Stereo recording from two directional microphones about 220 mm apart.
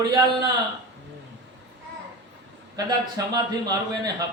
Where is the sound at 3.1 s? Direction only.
15° right (ahead or behind).